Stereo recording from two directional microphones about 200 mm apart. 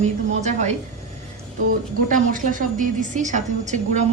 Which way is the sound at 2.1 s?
40° right (ahead or behind).